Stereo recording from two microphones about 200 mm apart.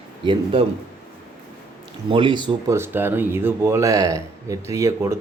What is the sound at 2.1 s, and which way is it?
Speech, 25° right (ahead or behind).